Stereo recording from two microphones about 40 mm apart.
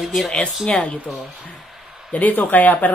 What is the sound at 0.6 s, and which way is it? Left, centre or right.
Speech, left.